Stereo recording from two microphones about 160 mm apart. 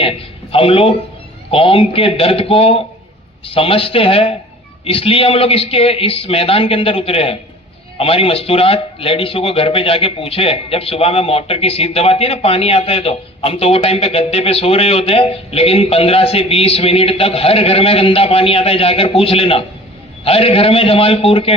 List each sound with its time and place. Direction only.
0.5 s a man's voice: 35° left (ahead or behind)